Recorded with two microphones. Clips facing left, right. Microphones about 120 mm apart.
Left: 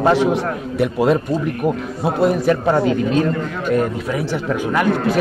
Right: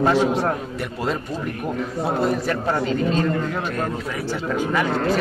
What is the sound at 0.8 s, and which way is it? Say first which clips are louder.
Speech: left 12 dB; 15° left (ahead or behind).